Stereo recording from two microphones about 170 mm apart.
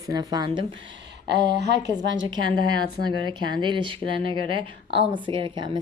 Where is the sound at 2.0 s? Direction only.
90° right.